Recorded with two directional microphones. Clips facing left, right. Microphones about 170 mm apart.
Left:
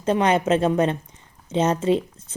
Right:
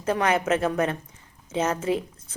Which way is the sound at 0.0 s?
25° left (ahead or behind).